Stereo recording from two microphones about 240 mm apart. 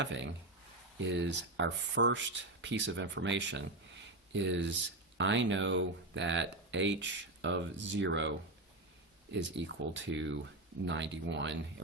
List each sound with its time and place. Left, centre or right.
0.0 s speech: right
9.5 s speech: right